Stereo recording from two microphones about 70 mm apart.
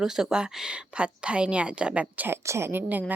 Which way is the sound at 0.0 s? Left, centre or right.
Centre.